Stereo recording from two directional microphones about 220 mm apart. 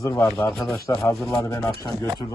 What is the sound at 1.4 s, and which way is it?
Speech, 15° left (ahead or behind).